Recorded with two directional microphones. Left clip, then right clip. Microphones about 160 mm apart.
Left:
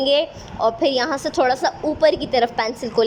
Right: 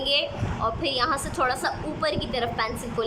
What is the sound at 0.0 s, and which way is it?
A woman's voice, 45° left (ahead or behind).